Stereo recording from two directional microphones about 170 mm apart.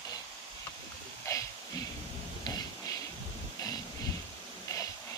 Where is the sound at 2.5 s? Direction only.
20° left (ahead or behind).